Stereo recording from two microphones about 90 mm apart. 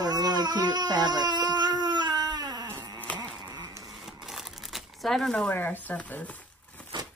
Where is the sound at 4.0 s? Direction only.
5° right (ahead or behind).